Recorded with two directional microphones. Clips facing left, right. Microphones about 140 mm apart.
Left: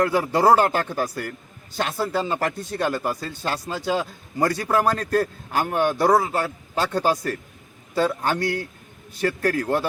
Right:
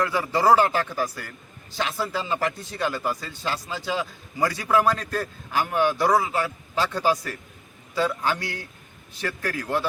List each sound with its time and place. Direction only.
0.0 s a man's voice: 50° left (ahead or behind)